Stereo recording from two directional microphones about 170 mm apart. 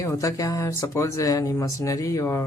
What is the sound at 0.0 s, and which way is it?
Speech, 20° left (ahead or behind).